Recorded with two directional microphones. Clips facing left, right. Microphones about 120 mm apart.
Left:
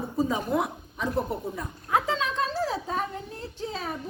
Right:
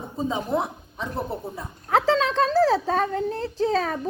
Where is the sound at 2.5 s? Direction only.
90° right.